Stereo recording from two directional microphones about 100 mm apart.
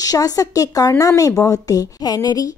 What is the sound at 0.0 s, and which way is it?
Speech, 40° left (ahead or behind).